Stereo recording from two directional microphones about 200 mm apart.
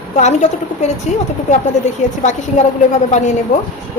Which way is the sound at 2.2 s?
35° left (ahead or behind).